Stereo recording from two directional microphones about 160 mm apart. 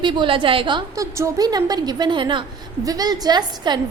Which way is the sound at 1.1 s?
20° right (ahead or behind).